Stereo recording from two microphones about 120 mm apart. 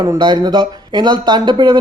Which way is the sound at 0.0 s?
35° right (ahead or behind).